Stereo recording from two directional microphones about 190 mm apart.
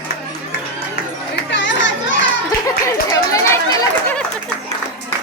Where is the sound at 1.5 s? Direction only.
70° left (ahead or behind).